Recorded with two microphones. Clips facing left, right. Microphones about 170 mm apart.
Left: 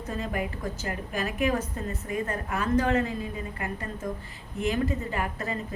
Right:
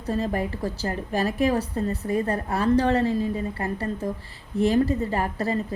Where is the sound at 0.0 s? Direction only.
35° right (ahead or behind).